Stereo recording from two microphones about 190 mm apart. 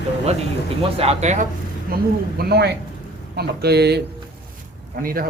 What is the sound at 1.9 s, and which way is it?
Speech, 50° right (ahead or behind).